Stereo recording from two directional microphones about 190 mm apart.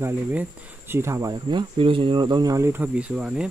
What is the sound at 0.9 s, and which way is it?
Speech, 15° right (ahead or behind).